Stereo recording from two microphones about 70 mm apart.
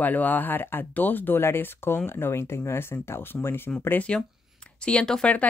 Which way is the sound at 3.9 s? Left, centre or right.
Left.